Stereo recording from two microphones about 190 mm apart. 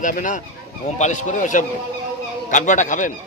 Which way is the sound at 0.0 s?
45° left (ahead or behind).